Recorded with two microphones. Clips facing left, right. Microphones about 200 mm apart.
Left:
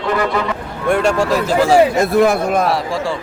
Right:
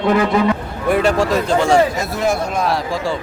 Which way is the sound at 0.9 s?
Centre (ahead or behind).